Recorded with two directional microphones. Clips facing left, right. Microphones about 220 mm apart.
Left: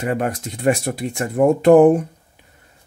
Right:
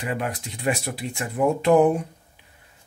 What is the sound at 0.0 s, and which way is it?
Speech, 45° left (ahead or behind).